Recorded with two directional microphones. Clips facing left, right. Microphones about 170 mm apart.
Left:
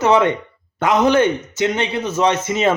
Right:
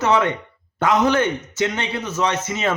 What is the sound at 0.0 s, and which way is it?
A man's voice, 20° left (ahead or behind).